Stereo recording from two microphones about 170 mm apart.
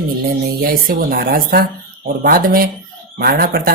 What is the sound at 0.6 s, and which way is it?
Speech, 60° right (ahead or behind).